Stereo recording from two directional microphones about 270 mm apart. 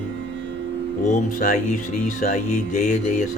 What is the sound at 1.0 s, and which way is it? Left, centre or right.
Speech, left.